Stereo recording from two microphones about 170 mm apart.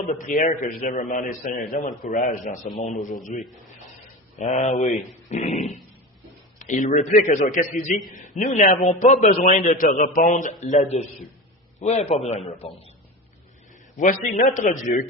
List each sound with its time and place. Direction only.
0.1 s a man's voice: 50° left (ahead or behind)
5.3 s a sound: 45° left (ahead or behind)
6.6 s a man's voice: 50° left (ahead or behind)
14.0 s a man's voice: 50° left (ahead or behind)